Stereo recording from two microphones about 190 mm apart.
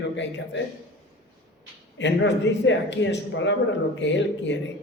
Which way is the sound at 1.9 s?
70° left (ahead or behind).